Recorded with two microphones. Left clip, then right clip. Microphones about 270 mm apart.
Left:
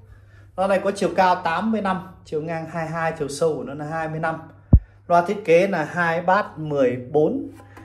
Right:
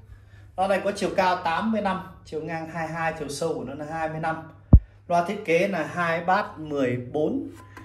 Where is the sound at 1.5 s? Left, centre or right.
Left.